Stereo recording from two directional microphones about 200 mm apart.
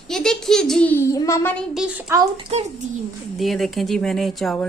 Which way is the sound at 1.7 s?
5° right (ahead or behind).